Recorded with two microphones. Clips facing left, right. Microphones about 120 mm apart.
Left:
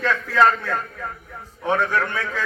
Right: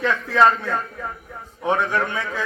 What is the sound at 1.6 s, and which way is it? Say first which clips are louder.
Speech: even; 15° right (ahead or behind).